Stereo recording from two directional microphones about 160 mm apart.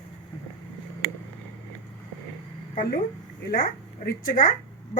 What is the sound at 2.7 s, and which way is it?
A woman's voice, 65° left (ahead or behind).